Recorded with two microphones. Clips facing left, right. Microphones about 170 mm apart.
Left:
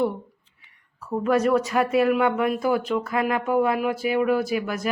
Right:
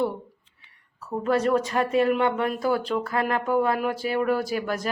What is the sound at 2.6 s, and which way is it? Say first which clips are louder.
Speech: left 2 dB; 10° left (ahead or behind).